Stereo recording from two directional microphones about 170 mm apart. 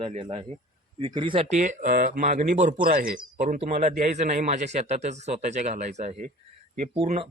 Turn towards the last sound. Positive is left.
turn(degrees=-35)  # may be behind; listen again after turning